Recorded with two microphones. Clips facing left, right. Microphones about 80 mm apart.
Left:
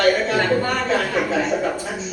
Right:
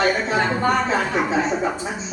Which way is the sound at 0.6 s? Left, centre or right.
Right.